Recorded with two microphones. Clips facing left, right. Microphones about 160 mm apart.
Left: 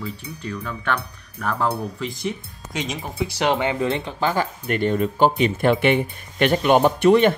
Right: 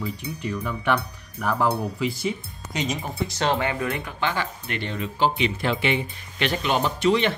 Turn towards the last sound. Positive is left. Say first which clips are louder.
# left 6 dB
turn(degrees=50)  # may be behind; listen again after turning